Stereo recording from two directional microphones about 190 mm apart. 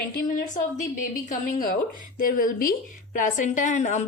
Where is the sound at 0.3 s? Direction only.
40° left (ahead or behind).